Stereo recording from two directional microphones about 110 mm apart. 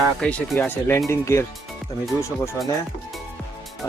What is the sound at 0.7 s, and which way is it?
Speech, 25° left (ahead or behind).